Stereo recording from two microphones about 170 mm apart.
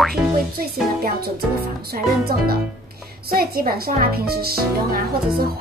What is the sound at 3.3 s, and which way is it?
Speech, 60° right (ahead or behind).